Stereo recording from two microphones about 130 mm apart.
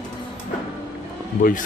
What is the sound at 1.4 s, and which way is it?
Speech, 90° left.